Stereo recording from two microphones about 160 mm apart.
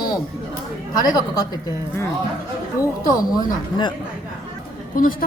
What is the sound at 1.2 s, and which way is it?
Speech, 20° left (ahead or behind).